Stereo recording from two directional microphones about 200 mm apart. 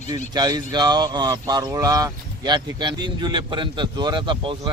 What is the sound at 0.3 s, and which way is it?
Speech, 20° right (ahead or behind).